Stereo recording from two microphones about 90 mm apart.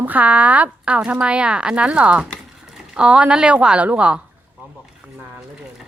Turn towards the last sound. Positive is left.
turn(degrees=-5)  # may be behind; listen again after turning